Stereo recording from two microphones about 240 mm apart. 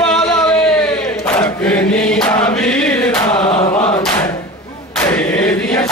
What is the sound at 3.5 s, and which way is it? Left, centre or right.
Chant, left.